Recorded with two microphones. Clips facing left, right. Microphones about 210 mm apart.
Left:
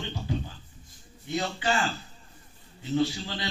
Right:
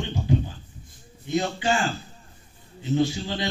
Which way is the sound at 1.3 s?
25° right (ahead or behind).